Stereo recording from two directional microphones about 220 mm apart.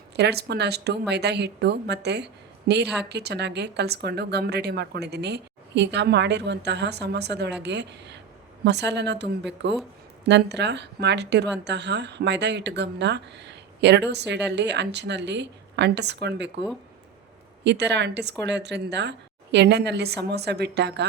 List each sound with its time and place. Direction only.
0.2 s speech: 50° right (ahead or behind)
17.6 s speech: 50° right (ahead or behind)